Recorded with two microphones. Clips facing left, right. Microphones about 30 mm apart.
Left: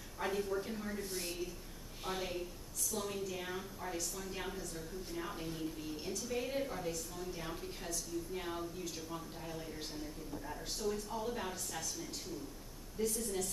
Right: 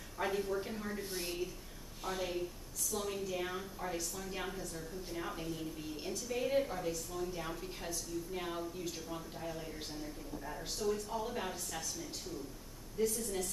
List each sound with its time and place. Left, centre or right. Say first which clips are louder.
0.2 s a woman's voice: right 1 dB; centre
2.0 s a woman's voice: right 2 dB; centre